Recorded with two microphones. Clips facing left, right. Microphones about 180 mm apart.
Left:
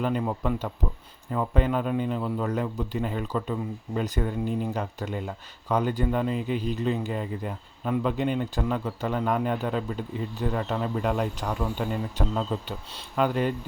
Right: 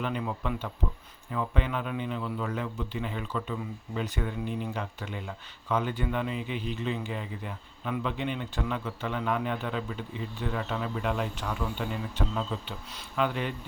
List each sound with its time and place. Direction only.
0.0 s a man's voice: 40° left (ahead or behind)